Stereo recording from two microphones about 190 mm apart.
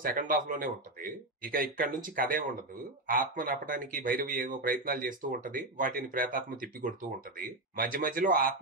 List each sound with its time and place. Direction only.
0.0 s speech: 45° right (ahead or behind)